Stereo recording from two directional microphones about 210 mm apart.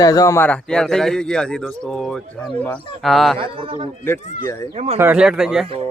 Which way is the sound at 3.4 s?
25° right (ahead or behind).